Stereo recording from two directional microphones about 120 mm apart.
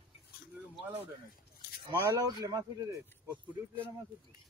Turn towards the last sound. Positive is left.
turn(degrees=-30)  # may be behind; listen again after turning